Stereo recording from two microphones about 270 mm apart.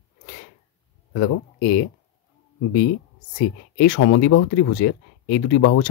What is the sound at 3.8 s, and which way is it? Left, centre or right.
Speech, left.